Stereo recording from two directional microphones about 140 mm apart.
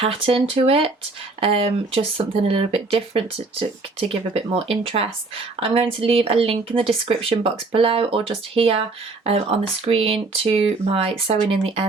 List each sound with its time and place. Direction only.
0.0 s speech: 45° right (ahead or behind)